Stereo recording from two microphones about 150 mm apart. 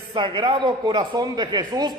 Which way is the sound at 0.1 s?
35° right (ahead or behind).